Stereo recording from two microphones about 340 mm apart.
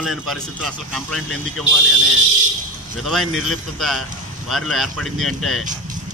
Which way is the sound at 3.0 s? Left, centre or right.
Centre.